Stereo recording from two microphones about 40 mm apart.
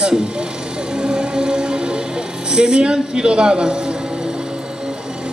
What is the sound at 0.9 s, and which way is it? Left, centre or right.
Music, right.